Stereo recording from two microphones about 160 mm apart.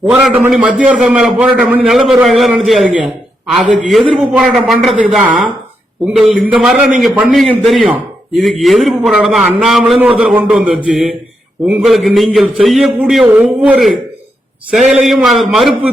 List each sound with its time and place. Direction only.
0.0 s a man's voice: 5° right (ahead or behind)